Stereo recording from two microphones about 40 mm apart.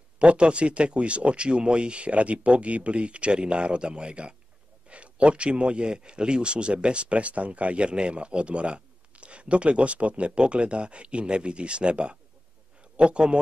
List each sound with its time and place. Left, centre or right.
0.2 s a man's voice: right